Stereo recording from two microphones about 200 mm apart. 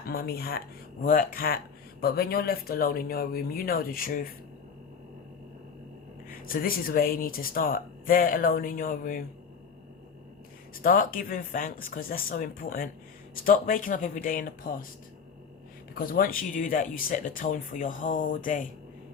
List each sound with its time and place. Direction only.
0.1 s speech: 50° left (ahead or behind)
6.2 s speech: 45° left (ahead or behind)
10.8 s speech: 45° left (ahead or behind)
16.0 s speech: 45° left (ahead or behind)